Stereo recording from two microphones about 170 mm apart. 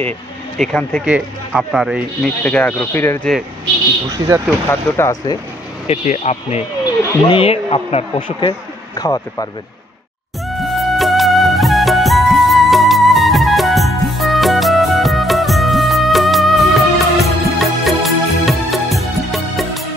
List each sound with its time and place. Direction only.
0.6 s speech: 5° left (ahead or behind)
1.0 s speech: 5° right (ahead or behind)
2.4 s speech: 10° left (ahead or behind)
4.1 s speech: 20° right (ahead or behind)
4.6 s speech: 15° left (ahead or behind)
5.9 s speech: 40° left (ahead or behind)
6.8 s speech: 30° left (ahead or behind)
10.5 s music: centre (ahead or behind)